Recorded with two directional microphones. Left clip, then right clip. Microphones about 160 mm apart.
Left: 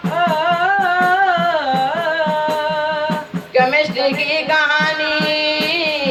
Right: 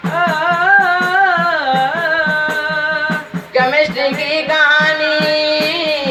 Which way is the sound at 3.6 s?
30° left (ahead or behind).